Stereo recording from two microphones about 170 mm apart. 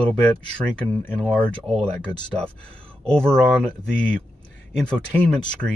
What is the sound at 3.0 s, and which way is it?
Speech, 5° left (ahead or behind).